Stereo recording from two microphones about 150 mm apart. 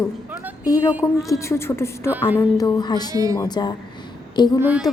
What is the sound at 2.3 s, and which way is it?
Speech, 20° left (ahead or behind).